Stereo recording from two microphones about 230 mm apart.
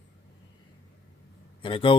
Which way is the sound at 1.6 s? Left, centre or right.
Left.